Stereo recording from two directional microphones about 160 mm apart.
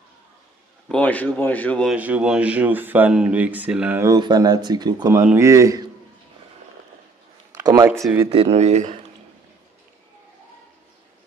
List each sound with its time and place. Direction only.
0.8 s speech: 10° left (ahead or behind)
1.9 s speech: 10° right (ahead or behind)
7.6 s speech: 25° right (ahead or behind)
8.5 s speech: 45° right (ahead or behind)